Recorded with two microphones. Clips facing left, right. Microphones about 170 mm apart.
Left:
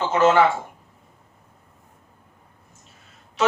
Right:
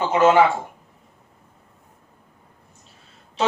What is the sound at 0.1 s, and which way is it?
Speech, 15° right (ahead or behind).